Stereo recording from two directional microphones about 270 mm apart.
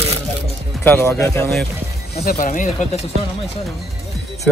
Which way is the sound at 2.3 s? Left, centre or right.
Left.